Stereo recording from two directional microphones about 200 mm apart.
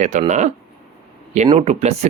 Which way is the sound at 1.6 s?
35° right (ahead or behind).